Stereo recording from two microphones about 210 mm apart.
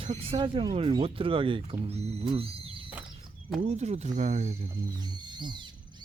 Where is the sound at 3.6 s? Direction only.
30° right (ahead or behind).